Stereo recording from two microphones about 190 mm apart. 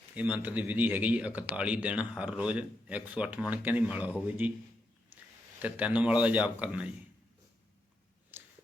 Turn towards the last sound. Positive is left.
turn(degrees=-5)  # may be behind; listen again after turning